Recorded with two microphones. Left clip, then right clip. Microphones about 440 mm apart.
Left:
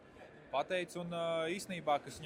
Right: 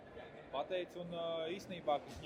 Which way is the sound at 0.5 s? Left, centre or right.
Left.